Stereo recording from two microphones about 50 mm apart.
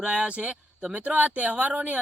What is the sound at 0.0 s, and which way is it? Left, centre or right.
A man's voice, centre.